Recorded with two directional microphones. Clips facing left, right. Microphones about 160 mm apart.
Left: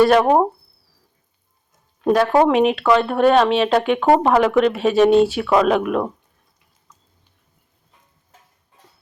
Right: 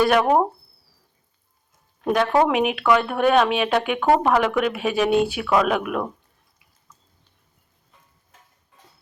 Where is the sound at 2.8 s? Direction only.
25° left (ahead or behind).